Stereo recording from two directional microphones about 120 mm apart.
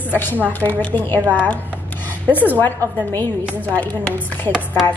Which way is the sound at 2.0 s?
15° left (ahead or behind).